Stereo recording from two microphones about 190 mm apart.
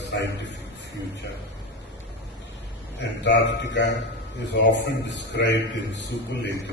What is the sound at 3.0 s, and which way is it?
A man's voice, 65° left (ahead or behind).